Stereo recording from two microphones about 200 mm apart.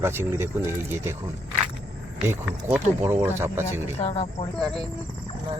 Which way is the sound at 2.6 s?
10° right (ahead or behind).